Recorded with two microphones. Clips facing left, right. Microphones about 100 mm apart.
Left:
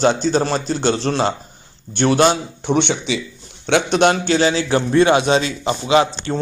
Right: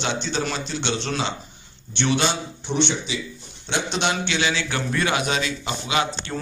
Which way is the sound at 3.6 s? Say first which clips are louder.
Left 10 dB; 55° left (ahead or behind).